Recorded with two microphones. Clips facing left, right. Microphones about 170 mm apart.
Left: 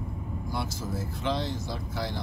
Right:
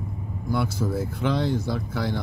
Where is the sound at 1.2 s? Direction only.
55° right (ahead or behind).